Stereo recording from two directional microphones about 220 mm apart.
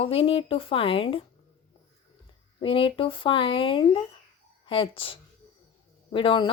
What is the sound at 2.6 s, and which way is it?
Speech, 25° left (ahead or behind).